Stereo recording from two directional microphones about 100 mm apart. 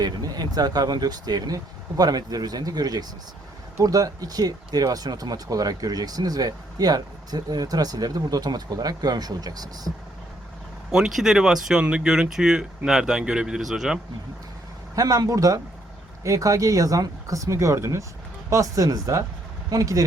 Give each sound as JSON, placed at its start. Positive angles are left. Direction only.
{"t": 0.0, "sound": "speech", "side_deg": -40}
{"t": 10.9, "sound": "speech", "side_deg": -5}
{"t": 14.9, "sound": "speech", "side_deg": -40}